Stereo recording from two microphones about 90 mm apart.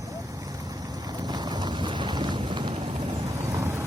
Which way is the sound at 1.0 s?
50° right (ahead or behind).